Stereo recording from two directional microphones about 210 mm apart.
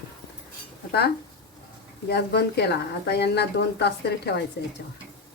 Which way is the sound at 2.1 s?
50° left (ahead or behind).